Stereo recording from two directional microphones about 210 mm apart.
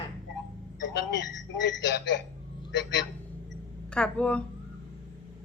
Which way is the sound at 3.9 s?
5° left (ahead or behind).